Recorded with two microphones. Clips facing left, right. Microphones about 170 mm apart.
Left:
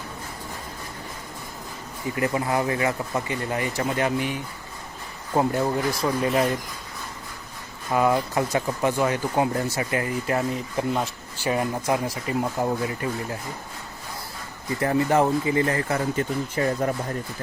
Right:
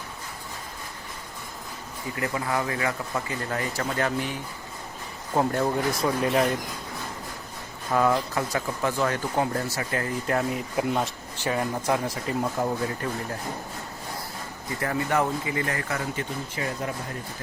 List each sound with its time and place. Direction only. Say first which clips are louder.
2.1 s speech: left 4 dB; 25° left (ahead or behind); by 6.6 s centre (ahead or behind)
7.9 s speech: left 2 dB; 15° left (ahead or behind)
10.2 s speech: left 1 dB; 5° left (ahead or behind)
11.3 s speech: left 2 dB; 15° left (ahead or behind)
14.8 s speech: left 5 dB; 30° left (ahead or behind)